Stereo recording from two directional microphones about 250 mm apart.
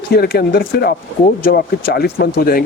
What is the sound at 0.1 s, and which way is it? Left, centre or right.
Speech, left.